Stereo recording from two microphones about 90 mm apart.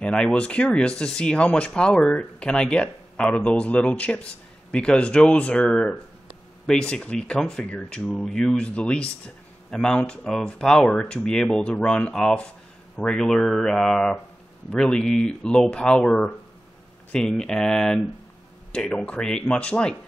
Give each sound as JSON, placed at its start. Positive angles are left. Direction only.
{"t": 0.0, "sound": "speech", "side_deg": 10}